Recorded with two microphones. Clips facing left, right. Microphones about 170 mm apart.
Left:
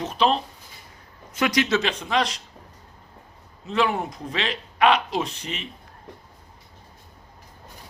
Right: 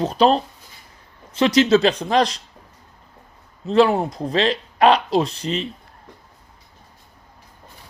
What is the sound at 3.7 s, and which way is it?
Speech, 35° right (ahead or behind).